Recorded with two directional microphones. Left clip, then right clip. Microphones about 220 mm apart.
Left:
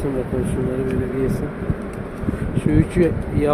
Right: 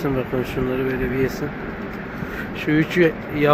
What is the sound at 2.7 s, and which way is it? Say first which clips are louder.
Speech: right 2 dB; 5° left (ahead or behind).